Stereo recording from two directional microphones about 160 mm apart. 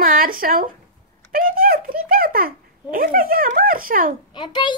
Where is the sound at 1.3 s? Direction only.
65° right (ahead or behind).